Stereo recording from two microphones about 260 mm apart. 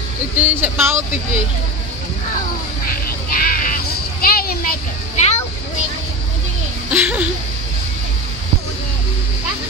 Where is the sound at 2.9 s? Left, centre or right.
Left.